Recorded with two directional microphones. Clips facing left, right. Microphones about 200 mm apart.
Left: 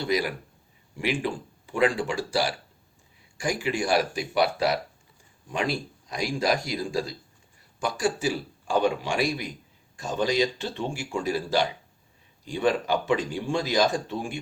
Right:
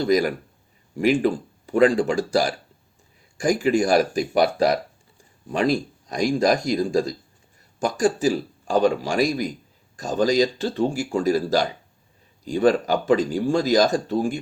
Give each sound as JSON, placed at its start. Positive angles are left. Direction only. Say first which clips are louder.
{"t": 0.0, "sound": "a man's voice", "louder": "right 7 dB", "side_deg": -45}